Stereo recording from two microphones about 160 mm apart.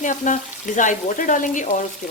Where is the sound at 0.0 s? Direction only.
55° left (ahead or behind).